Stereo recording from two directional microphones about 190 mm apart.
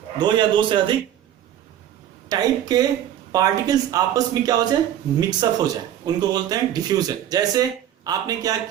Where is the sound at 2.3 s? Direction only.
20° right (ahead or behind).